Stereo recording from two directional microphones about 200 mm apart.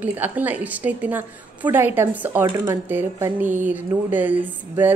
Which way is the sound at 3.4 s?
40° right (ahead or behind).